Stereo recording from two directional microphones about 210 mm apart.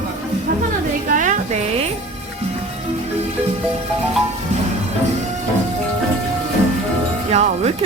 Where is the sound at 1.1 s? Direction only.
35° right (ahead or behind).